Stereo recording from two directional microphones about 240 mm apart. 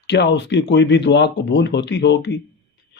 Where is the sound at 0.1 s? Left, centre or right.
Left.